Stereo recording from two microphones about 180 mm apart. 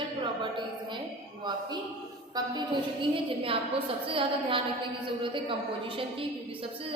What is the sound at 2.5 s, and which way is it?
A woman's voice, 25° right (ahead or behind).